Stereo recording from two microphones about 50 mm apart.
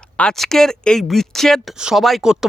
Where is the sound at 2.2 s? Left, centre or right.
Centre.